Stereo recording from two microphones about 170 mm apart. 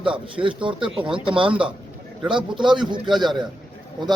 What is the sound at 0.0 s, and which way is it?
A man's voice, 30° right (ahead or behind).